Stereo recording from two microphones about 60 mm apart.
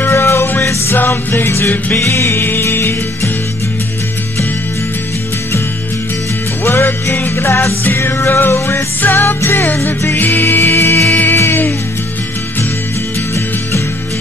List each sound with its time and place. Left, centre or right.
0.0 s music: left
0.9 s music: left
6.6 s music: left
9.0 s music: left
10.6 s music: left
11.1 s music: left
11.3 s music: left